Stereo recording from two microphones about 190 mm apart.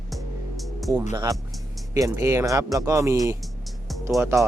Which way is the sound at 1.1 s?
15° right (ahead or behind).